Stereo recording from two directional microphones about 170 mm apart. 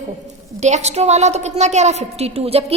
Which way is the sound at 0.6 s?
40° right (ahead or behind).